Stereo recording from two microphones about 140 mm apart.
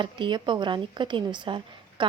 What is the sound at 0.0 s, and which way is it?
A woman's voice, 35° right (ahead or behind).